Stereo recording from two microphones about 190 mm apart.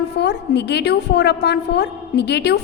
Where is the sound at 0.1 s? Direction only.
60° left (ahead or behind).